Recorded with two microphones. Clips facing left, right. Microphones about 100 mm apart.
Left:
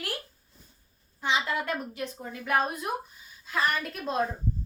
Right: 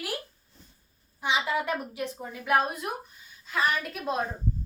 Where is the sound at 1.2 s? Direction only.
10° right (ahead or behind).